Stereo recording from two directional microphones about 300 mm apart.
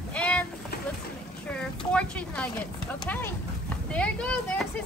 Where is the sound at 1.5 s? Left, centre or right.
Centre.